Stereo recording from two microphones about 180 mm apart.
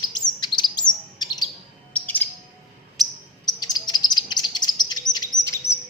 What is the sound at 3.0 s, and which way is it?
Bird, centre (ahead or behind).